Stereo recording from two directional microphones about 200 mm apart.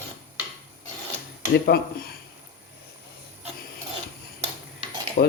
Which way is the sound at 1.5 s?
50° left (ahead or behind).